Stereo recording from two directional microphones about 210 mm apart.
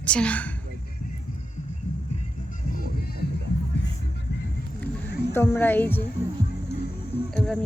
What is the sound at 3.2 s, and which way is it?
Music, 50° left (ahead or behind).